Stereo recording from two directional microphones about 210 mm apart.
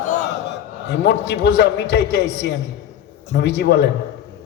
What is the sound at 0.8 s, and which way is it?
A man's voice, 55° left (ahead or behind).